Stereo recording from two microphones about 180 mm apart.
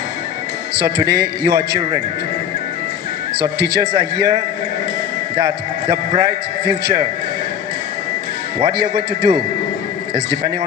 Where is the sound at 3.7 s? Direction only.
20° right (ahead or behind).